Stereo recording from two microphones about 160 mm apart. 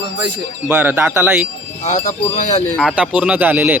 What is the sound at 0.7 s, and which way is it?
Speech, 10° right (ahead or behind).